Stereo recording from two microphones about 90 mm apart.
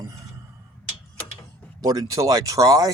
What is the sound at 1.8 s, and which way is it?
Speech, 45° right (ahead or behind).